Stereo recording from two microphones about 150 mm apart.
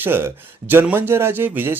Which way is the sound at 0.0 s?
15° right (ahead or behind).